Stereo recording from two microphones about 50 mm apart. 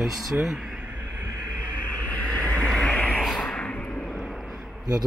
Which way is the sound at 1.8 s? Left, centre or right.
Left.